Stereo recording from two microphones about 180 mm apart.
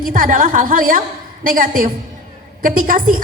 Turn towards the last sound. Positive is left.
turn(degrees=-50)  # may be behind; listen again after turning